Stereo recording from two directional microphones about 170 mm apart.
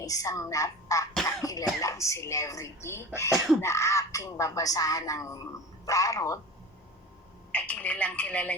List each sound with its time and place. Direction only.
0.0 s speech: 20° left (ahead or behind)
1.4 s cough: 20° left (ahead or behind)
1.8 s speech: 20° left (ahead or behind)
7.5 s speech: 10° left (ahead or behind)